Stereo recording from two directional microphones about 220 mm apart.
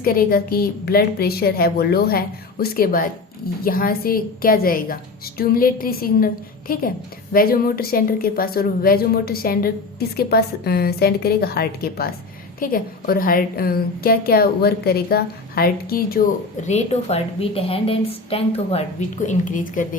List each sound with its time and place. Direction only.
0.0 s a woman's voice: 40° left (ahead or behind)
16.6 s a woman's voice: 30° left (ahead or behind)